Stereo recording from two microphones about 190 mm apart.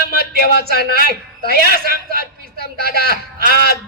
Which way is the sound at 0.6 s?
50° right (ahead or behind).